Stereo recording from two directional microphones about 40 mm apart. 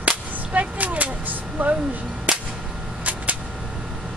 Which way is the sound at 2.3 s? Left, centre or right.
Right.